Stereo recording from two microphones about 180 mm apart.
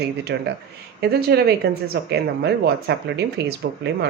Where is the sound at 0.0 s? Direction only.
65° right (ahead or behind).